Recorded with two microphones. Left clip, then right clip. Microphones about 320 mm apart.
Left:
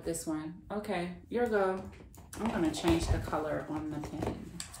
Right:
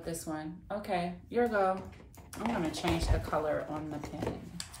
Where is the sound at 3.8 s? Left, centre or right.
Centre.